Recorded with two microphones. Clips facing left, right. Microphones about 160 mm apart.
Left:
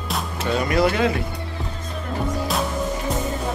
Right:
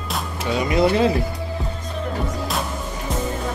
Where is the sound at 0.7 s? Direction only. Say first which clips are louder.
Right 3 dB; 30° right (ahead or behind).